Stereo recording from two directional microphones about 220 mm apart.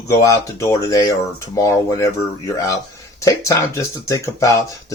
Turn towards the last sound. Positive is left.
turn(degrees=15)  # may be behind; listen again after turning